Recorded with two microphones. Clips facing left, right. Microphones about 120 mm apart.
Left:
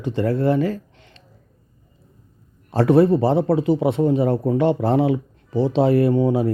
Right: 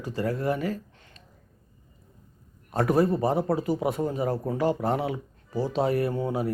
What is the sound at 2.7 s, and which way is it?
Speech, 30° left (ahead or behind).